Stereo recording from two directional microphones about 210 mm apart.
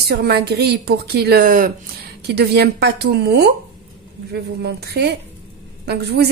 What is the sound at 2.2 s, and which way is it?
A woman's voice, 50° right (ahead or behind).